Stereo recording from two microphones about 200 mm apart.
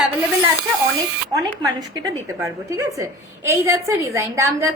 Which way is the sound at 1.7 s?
15° right (ahead or behind).